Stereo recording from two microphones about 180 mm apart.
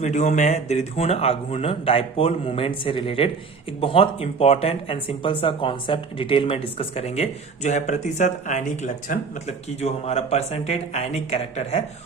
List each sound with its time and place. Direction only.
0.0 s speech: 40° left (ahead or behind)